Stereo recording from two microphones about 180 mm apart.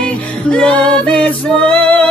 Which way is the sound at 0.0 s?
5° left (ahead or behind).